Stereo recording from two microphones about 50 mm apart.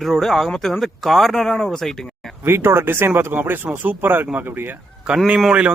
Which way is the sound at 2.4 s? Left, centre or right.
Right.